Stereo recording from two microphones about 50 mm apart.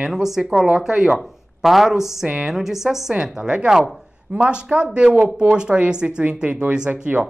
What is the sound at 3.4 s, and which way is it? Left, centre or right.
Speech, centre.